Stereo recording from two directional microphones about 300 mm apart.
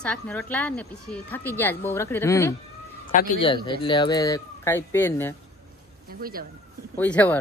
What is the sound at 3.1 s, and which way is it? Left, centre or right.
Speech, left.